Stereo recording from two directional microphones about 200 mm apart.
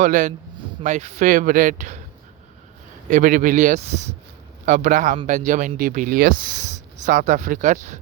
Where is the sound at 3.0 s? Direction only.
40° right (ahead or behind).